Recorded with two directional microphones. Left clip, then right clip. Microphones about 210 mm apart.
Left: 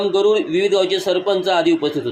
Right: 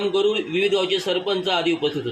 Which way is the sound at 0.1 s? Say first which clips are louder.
Left 5 dB; 15° left (ahead or behind).